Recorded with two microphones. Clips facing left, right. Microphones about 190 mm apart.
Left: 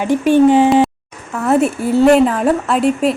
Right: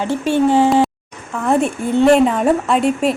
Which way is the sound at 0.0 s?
15° left (ahead or behind).